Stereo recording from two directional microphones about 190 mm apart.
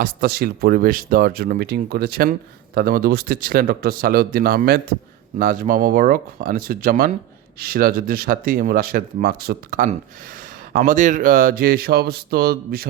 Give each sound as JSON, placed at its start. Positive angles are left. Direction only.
{"t": 0.0, "sound": "speech", "side_deg": -55}